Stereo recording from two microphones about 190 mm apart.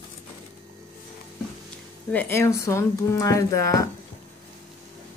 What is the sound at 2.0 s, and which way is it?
Speech, 10° left (ahead or behind).